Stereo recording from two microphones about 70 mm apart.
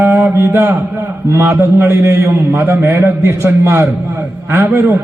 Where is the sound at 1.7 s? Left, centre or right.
Right.